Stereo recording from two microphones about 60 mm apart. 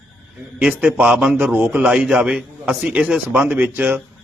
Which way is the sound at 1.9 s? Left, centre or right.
Centre.